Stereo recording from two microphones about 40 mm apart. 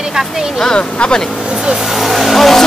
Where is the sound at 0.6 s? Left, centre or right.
Left.